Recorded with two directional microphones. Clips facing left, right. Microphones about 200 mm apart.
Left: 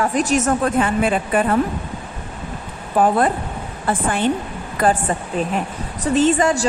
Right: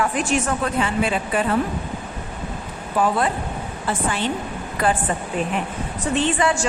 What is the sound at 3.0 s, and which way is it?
A woman's voice, 50° left (ahead or behind).